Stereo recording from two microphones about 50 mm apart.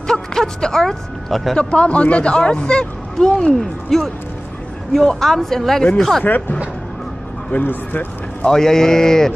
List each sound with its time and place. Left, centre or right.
0.0 s speech: centre
1.6 s speech: left
3.5 s speech: centre
7.6 s speech: left
8.5 s speech: centre